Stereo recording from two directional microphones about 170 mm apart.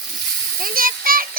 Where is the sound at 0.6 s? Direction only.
55° right (ahead or behind).